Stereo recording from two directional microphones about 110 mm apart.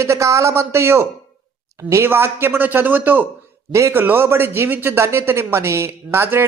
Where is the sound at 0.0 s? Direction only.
25° right (ahead or behind).